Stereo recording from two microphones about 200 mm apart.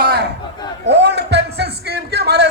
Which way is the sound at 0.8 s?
60° right (ahead or behind).